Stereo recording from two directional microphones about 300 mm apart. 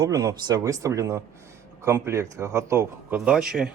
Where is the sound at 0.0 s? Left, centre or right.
Centre.